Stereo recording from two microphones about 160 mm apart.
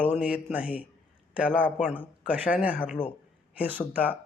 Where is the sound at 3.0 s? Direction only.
30° left (ahead or behind).